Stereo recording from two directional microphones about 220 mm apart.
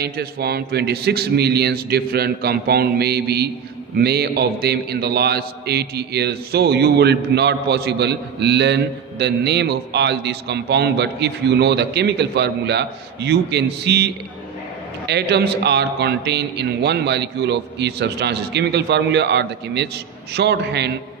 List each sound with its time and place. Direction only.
0.0 s a man's voice: 45° right (ahead or behind)